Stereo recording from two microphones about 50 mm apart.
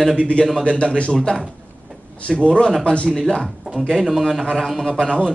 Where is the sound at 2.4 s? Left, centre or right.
Centre.